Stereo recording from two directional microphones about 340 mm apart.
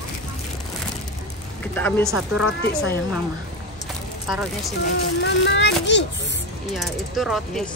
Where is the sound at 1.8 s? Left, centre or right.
Centre.